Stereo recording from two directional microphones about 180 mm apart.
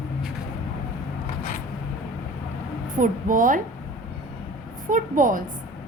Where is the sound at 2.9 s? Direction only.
45° right (ahead or behind).